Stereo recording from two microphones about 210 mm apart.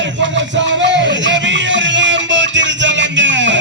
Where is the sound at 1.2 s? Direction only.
60° right (ahead or behind).